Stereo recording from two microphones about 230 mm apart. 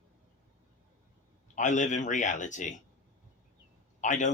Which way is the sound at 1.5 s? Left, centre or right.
Left.